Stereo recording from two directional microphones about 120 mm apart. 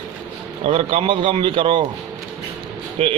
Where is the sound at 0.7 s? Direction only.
50° right (ahead or behind).